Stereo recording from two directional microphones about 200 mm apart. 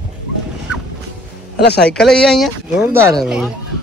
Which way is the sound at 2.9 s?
15° right (ahead or behind).